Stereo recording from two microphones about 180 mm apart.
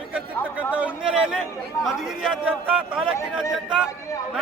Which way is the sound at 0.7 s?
5° right (ahead or behind).